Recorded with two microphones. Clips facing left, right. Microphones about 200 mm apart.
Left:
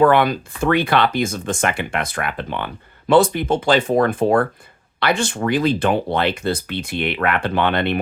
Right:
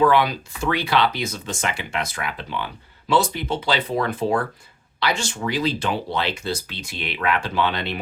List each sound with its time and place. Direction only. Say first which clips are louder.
0.0 s speech: left 4 dB; 55° left (ahead or behind)